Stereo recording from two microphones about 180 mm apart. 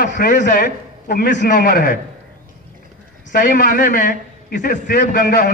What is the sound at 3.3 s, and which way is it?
A man's voice, 45° left (ahead or behind).